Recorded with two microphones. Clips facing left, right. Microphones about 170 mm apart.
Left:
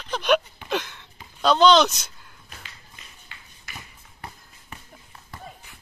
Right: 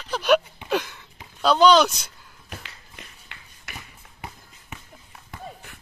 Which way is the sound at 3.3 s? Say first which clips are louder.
Right 1 dB; 65° right (ahead or behind).